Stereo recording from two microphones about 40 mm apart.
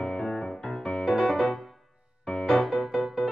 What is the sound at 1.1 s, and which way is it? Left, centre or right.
Music, centre.